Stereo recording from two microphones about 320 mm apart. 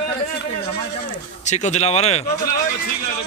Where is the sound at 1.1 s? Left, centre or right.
Left.